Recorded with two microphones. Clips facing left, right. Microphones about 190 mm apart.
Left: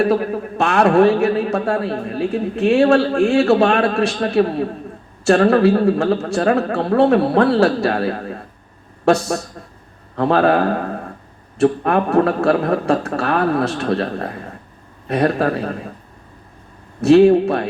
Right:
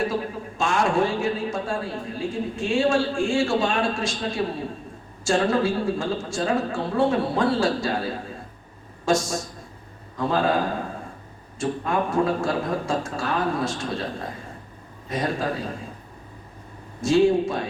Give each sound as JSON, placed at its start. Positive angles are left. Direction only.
{"t": 0.0, "sound": "a man's voice", "side_deg": 65}
{"t": 17.0, "sound": "a man's voice", "side_deg": 65}